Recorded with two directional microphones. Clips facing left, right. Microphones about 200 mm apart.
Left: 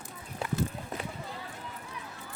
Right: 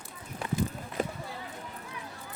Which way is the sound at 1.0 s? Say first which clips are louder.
Right 12 dB; 45° right (ahead or behind).